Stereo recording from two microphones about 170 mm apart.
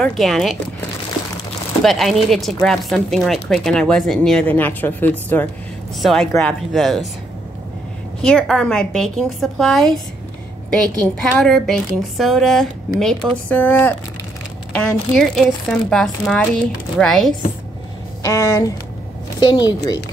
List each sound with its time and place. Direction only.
0.0 s speech: 5° left (ahead or behind)
1.8 s speech: centre (ahead or behind)
8.2 s speech: 5° left (ahead or behind)
11.3 s speech: 5° left (ahead or behind)
18.2 s a woman's voice: 15° left (ahead or behind)